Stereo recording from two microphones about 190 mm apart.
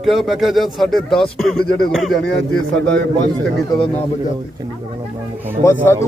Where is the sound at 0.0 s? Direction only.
Centre (ahead or behind).